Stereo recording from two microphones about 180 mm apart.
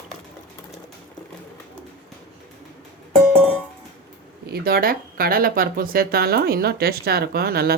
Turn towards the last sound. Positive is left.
turn(degrees=-60)  # may be behind; listen again after turning